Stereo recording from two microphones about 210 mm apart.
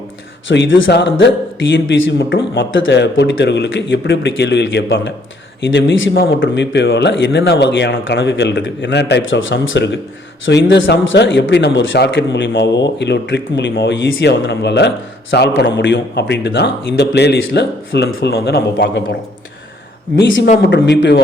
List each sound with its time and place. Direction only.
0.4 s a man's voice: 60° left (ahead or behind)
20.1 s a man's voice: 55° left (ahead or behind)